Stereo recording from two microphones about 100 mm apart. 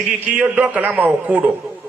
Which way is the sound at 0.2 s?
15° right (ahead or behind).